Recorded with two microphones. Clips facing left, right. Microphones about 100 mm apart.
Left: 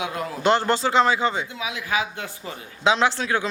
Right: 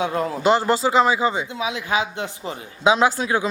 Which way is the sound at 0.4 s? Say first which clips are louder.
Right 1 dB; 5° right (ahead or behind).